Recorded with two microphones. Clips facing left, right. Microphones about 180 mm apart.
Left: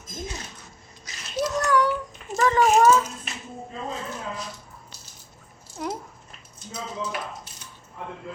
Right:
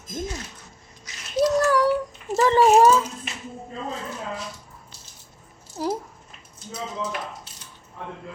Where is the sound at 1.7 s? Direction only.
35° right (ahead or behind).